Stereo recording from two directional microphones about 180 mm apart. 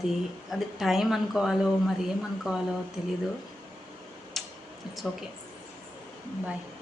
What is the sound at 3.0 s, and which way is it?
Speech, 5° right (ahead or behind).